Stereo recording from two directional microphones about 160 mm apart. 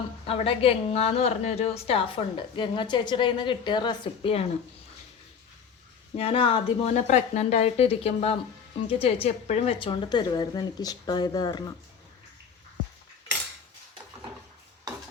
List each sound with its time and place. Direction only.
0.3 s a woman's voice: 35° left (ahead or behind)
6.1 s a woman's voice: 35° left (ahead or behind)